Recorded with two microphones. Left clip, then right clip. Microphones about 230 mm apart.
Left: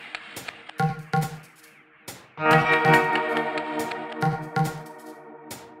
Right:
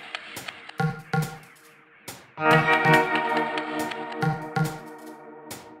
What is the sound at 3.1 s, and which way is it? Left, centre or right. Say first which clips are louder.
Music: even; centre.